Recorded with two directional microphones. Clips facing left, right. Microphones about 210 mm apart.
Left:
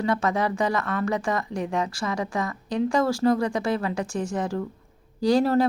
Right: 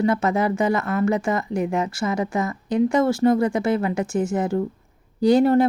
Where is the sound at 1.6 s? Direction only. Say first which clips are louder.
Right 4 dB; 5° right (ahead or behind).